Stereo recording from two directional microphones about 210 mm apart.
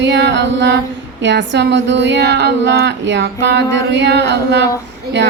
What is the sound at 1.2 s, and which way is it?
Speech, 60° right (ahead or behind).